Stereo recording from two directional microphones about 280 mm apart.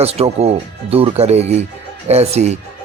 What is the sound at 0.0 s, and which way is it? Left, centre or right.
A man's voice, right.